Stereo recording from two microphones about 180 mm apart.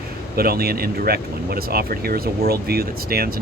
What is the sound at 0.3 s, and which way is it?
Speech, 60° right (ahead or behind).